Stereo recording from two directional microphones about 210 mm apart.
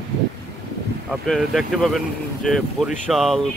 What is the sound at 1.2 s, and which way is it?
Speech, centre (ahead or behind).